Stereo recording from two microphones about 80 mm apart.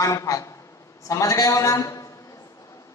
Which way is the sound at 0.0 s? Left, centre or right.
Left.